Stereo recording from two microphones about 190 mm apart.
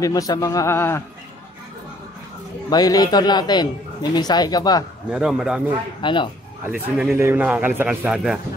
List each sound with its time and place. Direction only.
0.0 s speech: 20° left (ahead or behind)
2.7 s a man's voice: 20° left (ahead or behind)
5.1 s a man's voice: 5° right (ahead or behind)
5.9 s a man's voice: 25° left (ahead or behind)
6.6 s a man's voice: 10° right (ahead or behind)